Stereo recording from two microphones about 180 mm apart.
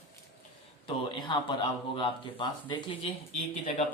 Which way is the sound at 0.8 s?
25° left (ahead or behind).